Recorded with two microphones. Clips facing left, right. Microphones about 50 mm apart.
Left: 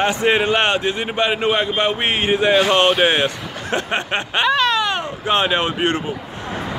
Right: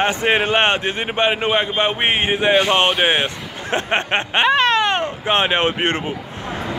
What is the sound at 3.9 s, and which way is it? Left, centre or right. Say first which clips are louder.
A man's voice: right 2 dB; right.